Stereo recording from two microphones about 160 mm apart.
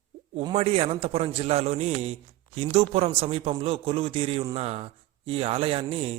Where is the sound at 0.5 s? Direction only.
40° right (ahead or behind).